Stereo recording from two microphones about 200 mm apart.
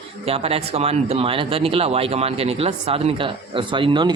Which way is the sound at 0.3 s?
30° right (ahead or behind).